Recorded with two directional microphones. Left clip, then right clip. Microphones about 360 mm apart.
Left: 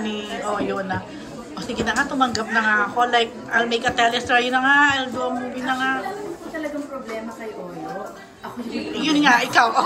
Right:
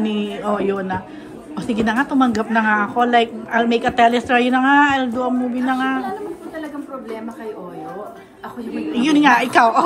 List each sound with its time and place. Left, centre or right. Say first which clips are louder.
0.0 s a woman's voice: right 4 dB; right
8.9 s a woman's voice: right 3 dB; centre